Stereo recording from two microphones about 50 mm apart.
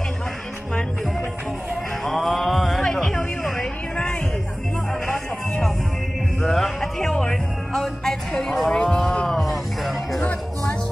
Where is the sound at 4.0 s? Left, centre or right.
Left.